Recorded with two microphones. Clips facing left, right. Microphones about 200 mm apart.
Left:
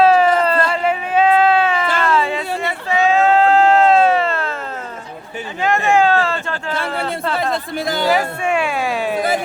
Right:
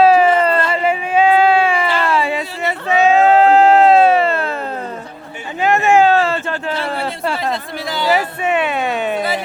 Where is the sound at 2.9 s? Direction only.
20° right (ahead or behind).